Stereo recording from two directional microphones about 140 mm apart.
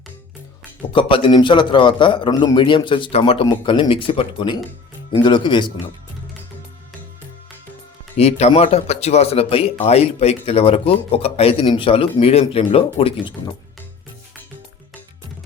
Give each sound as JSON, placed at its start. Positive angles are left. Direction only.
{"t": 0.9, "sound": "a man's voice", "side_deg": 40}
{"t": 8.1, "sound": "a man's voice", "side_deg": 50}